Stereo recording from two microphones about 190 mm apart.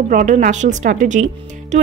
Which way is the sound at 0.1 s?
40° right (ahead or behind).